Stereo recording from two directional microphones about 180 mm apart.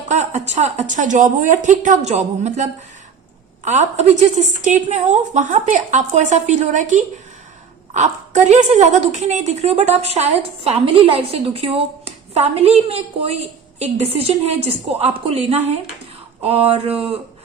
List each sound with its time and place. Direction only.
0.1 s a woman's voice: 40° right (ahead or behind)